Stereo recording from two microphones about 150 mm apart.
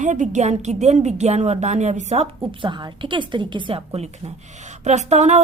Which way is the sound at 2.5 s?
30° right (ahead or behind).